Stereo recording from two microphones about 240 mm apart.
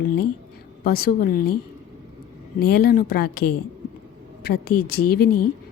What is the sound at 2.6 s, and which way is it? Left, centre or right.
A woman's voice, left.